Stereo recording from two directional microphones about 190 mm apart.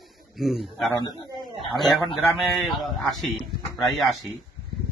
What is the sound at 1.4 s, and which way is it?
A man's voice, centre (ahead or behind).